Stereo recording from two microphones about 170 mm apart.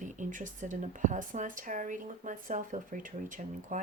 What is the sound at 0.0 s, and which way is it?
Speech, 50° right (ahead or behind).